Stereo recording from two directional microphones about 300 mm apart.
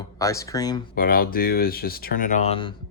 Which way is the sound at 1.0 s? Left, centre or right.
Left.